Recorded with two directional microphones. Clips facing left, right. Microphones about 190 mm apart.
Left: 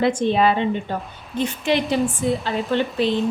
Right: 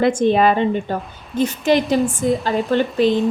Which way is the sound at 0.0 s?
50° right (ahead or behind).